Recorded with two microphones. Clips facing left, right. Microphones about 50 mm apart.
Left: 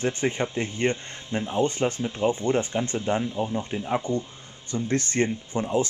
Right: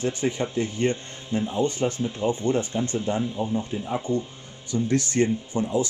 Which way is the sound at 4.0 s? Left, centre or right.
Centre.